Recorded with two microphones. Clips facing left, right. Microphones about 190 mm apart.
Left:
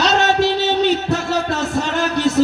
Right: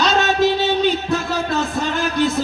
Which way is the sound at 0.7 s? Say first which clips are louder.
Left 1 dB; 75° left (ahead or behind).